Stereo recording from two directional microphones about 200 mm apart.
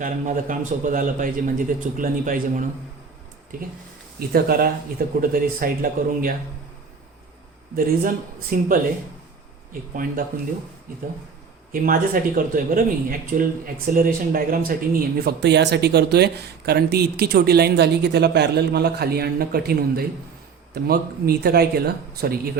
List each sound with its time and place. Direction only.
0.0 s a man's voice: 40° right (ahead or behind)
7.8 s speech: 45° right (ahead or behind)
9.9 s speech: 45° right (ahead or behind)
11.7 s speech: 45° right (ahead or behind)